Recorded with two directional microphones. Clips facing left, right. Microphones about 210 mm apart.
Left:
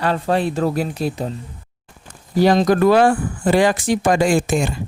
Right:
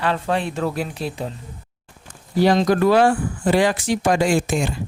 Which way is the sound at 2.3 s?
45° left (ahead or behind).